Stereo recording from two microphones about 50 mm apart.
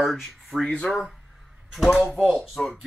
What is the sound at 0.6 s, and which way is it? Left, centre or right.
Speech, centre.